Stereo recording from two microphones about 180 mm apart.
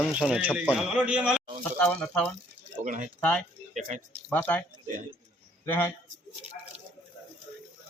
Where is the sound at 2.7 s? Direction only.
45° right (ahead or behind).